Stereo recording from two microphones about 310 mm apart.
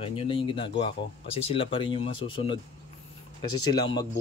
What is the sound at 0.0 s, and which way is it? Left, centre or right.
Speech, centre.